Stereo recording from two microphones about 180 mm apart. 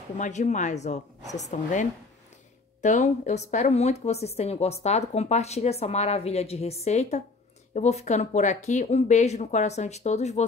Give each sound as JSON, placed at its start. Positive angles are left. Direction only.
{"t": 0.2, "sound": "a woman's voice", "side_deg": 40}